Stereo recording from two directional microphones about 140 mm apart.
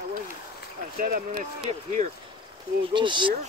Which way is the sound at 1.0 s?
90° right.